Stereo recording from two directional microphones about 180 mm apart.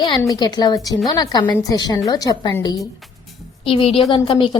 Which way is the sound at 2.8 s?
Centre (ahead or behind).